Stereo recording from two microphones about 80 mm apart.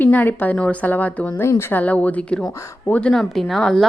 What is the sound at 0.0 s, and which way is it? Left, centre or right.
Speech, left.